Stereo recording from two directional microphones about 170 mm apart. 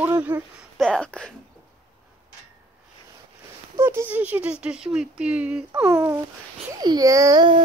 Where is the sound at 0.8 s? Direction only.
5° left (ahead or behind).